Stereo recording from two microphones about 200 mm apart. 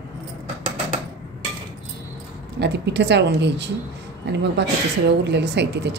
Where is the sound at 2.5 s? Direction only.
60° right (ahead or behind).